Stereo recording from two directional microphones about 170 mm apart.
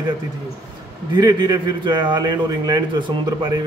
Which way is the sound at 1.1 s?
25° right (ahead or behind).